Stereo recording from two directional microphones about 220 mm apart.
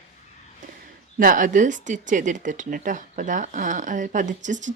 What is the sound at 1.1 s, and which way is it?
Speech, 40° right (ahead or behind).